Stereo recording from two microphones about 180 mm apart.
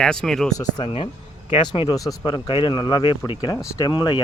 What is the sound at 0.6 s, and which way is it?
Speech, 20° left (ahead or behind).